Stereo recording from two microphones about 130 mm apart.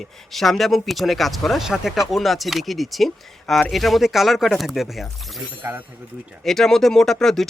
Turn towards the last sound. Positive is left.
turn(degrees=5)  # may be behind; listen again after turning